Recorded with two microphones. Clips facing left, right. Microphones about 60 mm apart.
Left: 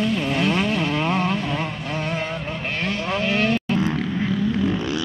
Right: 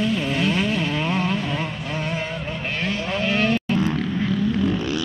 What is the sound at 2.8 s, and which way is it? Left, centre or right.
Vehicle, left.